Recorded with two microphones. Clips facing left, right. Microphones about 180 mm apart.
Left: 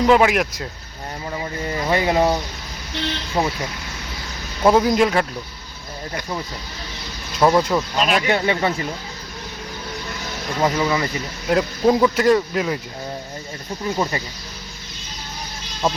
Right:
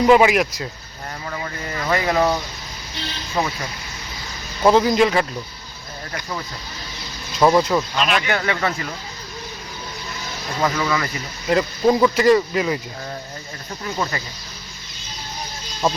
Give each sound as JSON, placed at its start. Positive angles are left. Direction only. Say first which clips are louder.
{"t": 0.0, "sound": "speech", "louder": "right 1 dB", "side_deg": -5}
{"t": 1.3, "sound": "speech", "louder": "left 4 dB", "side_deg": 25}
{"t": 3.0, "sound": "speech", "louder": "left 6 dB", "side_deg": 60}
{"t": 3.4, "sound": "speech", "louder": "left 1 dB", "side_deg": 30}
{"t": 4.6, "sound": "speech", "louder": "even", "side_deg": 5}
{"t": 7.3, "sound": "speech", "louder": "right 1 dB", "side_deg": 0}
{"t": 7.9, "sound": "speech", "louder": "left 2 dB", "side_deg": 40}
{"t": 8.4, "sound": "speech", "louder": "left 2 dB", "side_deg": 25}
{"t": 10.6, "sound": "speech", "louder": "left 2 dB", "side_deg": 25}
{"t": 11.4, "sound": "speech", "louder": "even", "side_deg": 0}